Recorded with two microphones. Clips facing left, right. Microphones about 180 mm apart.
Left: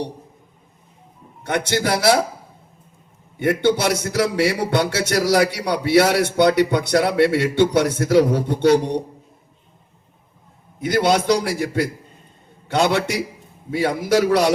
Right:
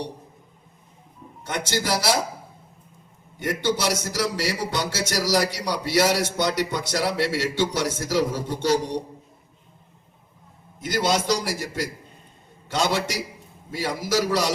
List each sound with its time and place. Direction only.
1.5 s a man's voice: 60° left (ahead or behind)
3.3 s a man's voice: 60° left (ahead or behind)
10.8 s a man's voice: 60° left (ahead or behind)